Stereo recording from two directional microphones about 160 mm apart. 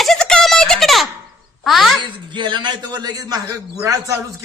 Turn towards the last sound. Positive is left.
turn(degrees=-20)  # may be behind; listen again after turning